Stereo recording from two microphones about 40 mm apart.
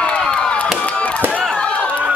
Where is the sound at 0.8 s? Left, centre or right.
Left.